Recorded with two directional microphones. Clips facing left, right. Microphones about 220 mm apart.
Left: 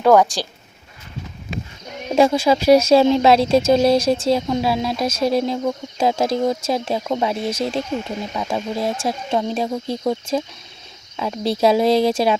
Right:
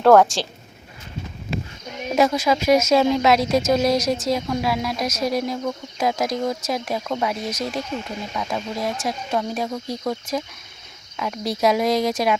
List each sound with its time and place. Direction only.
0.0 s a woman's voice: centre (ahead or behind)
2.1 s speech: 30° left (ahead or behind)